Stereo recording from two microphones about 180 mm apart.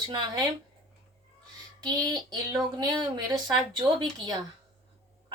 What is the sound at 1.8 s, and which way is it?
A woman's voice, 20° right (ahead or behind).